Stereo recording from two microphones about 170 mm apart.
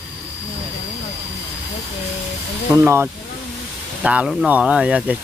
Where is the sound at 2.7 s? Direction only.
15° right (ahead or behind).